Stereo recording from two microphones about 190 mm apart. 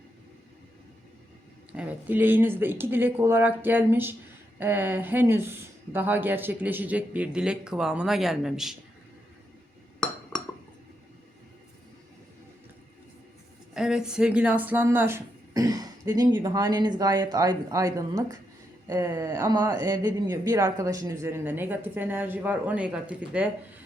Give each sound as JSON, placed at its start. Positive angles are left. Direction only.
{"t": 1.7, "sound": "speech", "side_deg": -5}
{"t": 13.7, "sound": "speech", "side_deg": -5}